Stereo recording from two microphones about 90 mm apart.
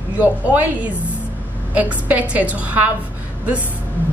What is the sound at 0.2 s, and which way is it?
A woman's voice, 15° right (ahead or behind).